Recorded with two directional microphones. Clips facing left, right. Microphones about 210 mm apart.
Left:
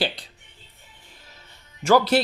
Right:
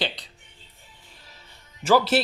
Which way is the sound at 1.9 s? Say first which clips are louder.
Left 2 dB; 5° right (ahead or behind).